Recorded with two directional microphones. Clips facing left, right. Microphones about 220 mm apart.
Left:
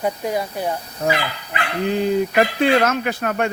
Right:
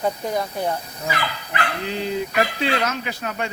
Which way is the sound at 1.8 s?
50° left (ahead or behind).